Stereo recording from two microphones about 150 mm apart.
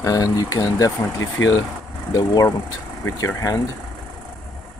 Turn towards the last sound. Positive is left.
turn(degrees=20)  # may be behind; listen again after turning